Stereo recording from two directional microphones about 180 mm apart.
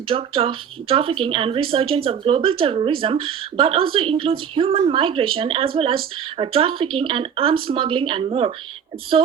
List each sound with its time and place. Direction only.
0.1 s speech: 30° right (ahead or behind)